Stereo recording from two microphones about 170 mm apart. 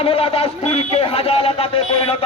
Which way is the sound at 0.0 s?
35° left (ahead or behind).